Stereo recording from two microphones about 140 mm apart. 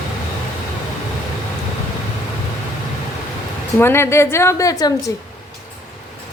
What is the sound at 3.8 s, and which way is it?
A woman's voice, 15° left (ahead or behind).